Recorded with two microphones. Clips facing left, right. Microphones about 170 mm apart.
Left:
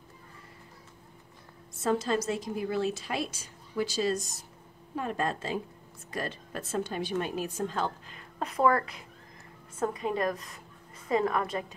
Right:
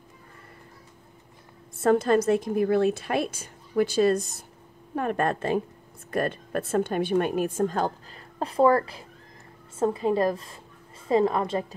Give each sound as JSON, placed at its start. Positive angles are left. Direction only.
{"t": 1.8, "sound": "a woman's voice", "side_deg": -55}